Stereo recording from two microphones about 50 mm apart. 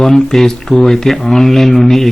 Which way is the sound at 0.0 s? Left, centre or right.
Centre.